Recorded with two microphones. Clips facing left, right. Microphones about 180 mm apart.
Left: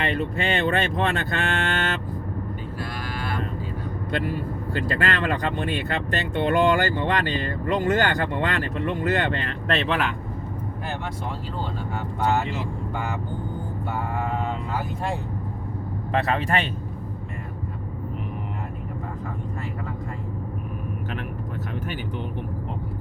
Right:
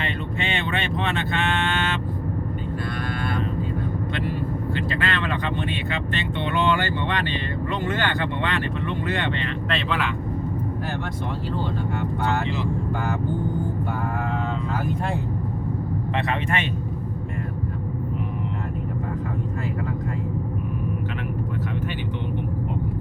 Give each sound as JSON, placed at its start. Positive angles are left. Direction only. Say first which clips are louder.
{"t": 0.1, "sound": "speech", "louder": "left 3 dB", "side_deg": 40}
{"t": 4.7, "sound": "speech", "louder": "left 4 dB", "side_deg": 45}
{"t": 16.1, "sound": "speech", "louder": "left 4 dB", "side_deg": 40}